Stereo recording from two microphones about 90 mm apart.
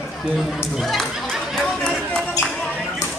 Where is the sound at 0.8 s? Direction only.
Centre (ahead or behind).